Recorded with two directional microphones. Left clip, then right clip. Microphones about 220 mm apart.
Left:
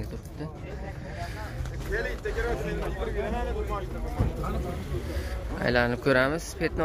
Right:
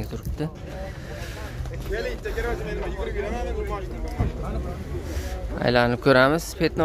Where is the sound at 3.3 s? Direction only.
50° right (ahead or behind).